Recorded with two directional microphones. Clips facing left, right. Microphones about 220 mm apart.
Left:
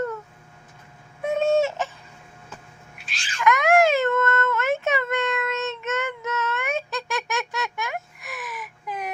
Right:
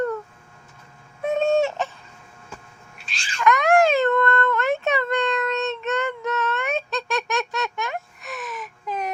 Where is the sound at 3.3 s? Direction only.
15° left (ahead or behind).